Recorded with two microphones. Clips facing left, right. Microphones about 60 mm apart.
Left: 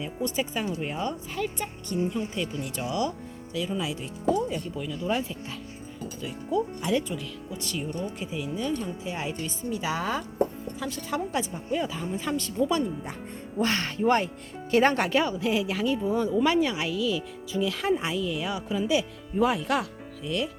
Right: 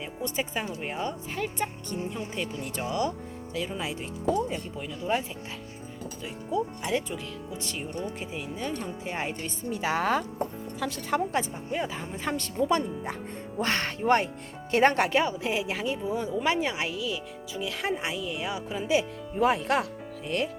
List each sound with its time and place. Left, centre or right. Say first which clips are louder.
0.0 s speech: left 2 dB; right
8.7 s speech: left 2 dB; right
10.8 s speech: right 2 dB; right
11.1 s speech: right 2 dB; right